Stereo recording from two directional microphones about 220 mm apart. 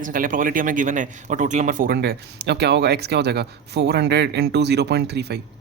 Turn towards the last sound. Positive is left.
turn(degrees=-50)  # may be behind; listen again after turning